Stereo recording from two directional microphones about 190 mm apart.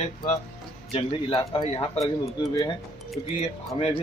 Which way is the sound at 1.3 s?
20° left (ahead or behind).